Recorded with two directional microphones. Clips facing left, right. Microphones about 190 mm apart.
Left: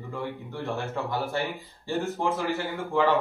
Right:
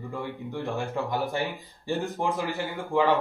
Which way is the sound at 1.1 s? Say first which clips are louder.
Even; 15° right (ahead or behind).